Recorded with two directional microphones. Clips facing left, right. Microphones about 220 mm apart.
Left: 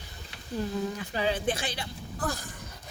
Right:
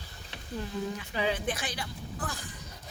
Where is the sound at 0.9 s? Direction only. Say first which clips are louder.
Left 2 dB; 35° left (ahead or behind).